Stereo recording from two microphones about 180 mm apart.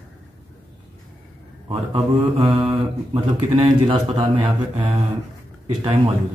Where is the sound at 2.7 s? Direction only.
25° right (ahead or behind).